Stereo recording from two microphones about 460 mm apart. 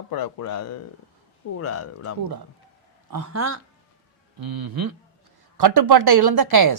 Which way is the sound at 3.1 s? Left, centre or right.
Right.